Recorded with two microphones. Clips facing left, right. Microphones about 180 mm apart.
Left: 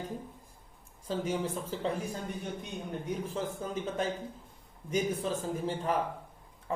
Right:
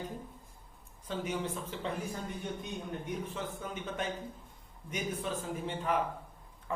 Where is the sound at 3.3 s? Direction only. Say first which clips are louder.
Left 5 dB; 35° left (ahead or behind).